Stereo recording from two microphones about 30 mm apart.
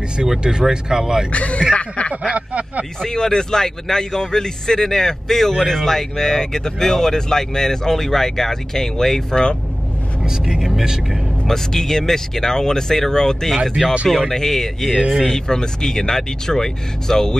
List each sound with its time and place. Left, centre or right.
0.4 s speech: right
1.3 s snicker: left
2.3 s speech: right
3.0 s speech: left
10.2 s speech: right
11.4 s speech: centre
15.3 s speech: left